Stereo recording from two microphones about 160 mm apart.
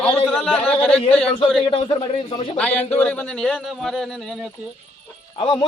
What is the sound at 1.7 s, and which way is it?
Speech, 35° left (ahead or behind).